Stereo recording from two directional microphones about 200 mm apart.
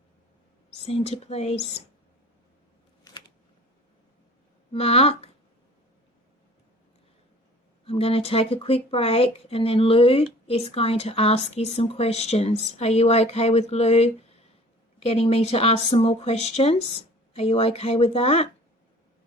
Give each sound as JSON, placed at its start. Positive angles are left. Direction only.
{"t": 0.7, "sound": "a woman's voice", "side_deg": 30}
{"t": 3.1, "sound": "a sound", "side_deg": 20}
{"t": 4.7, "sound": "speech", "side_deg": 30}
{"t": 7.9, "sound": "a woman's voice", "side_deg": 30}